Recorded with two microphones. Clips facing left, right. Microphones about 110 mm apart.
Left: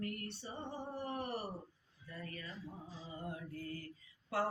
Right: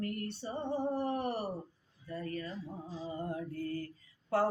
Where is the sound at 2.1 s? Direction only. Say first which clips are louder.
Right 9 dB; 40° right (ahead or behind).